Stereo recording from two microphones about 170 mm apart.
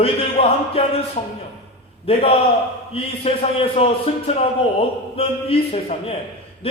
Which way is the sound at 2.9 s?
35° left (ahead or behind).